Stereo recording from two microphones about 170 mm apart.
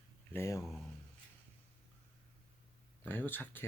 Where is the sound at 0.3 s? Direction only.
15° left (ahead or behind).